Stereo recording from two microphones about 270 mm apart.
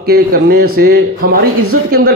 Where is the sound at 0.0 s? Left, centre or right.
Right.